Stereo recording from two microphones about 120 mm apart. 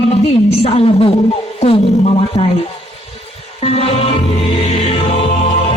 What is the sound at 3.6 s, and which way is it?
Music, 55° left (ahead or behind).